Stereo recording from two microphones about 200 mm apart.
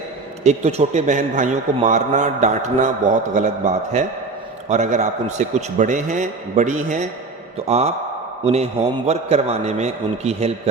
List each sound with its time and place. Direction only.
0.4 s a man's voice: 35° right (ahead or behind)